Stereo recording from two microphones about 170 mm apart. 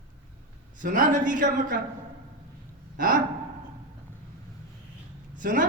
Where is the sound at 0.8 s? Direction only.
50° right (ahead or behind).